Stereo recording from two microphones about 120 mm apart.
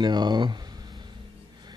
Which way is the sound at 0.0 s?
35° right (ahead or behind).